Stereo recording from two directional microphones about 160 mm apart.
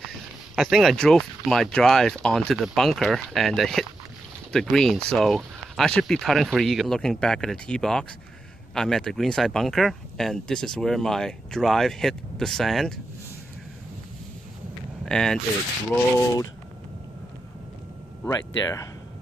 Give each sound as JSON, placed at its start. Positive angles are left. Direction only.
{"t": 0.6, "sound": "speech", "side_deg": 0}
{"t": 15.0, "sound": "speech", "side_deg": 5}
{"t": 18.3, "sound": "speech", "side_deg": 25}